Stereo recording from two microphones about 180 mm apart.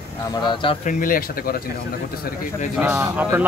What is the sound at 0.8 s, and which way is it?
Speech, 50° left (ahead or behind).